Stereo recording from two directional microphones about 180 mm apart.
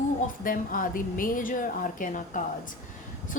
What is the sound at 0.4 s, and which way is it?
A woman's voice, 50° left (ahead or behind).